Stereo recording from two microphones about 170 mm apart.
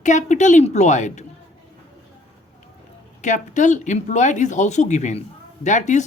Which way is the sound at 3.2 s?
45° left (ahead or behind).